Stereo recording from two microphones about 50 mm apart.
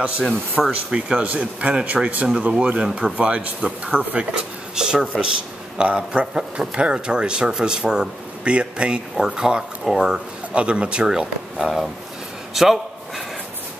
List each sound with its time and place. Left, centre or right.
0.6 s speech: centre
1.0 s speech: right
4.3 s speech: centre
11.5 s speech: centre
12.5 s a sound: centre